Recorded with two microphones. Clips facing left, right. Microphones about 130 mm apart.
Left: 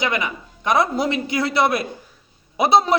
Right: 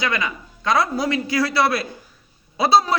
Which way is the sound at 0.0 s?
20° left (ahead or behind).